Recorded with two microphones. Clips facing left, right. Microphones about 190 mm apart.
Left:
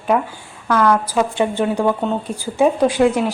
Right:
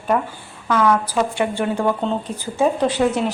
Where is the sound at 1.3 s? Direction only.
20° left (ahead or behind).